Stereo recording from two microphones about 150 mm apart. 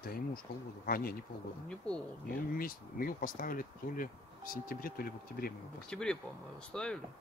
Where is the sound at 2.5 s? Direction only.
75° left (ahead or behind).